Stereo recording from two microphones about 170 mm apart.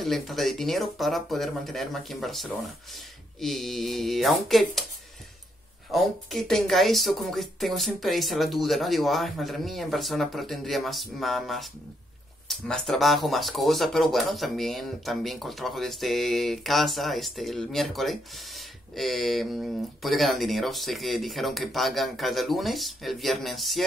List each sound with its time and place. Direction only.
0.0 s speech: centre (ahead or behind)
5.9 s speech: centre (ahead or behind)